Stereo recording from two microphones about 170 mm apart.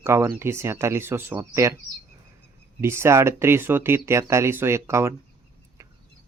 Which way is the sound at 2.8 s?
15° right (ahead or behind).